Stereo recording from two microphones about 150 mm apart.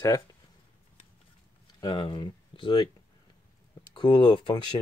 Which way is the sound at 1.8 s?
30° left (ahead or behind).